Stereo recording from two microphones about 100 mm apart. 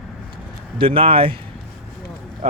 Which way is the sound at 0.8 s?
70° right (ahead or behind).